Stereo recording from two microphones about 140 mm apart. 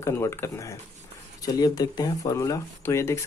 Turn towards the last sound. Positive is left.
turn(degrees=20)  # may be behind; listen again after turning